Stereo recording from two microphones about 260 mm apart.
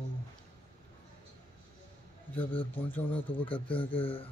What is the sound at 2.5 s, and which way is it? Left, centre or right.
Speech, centre.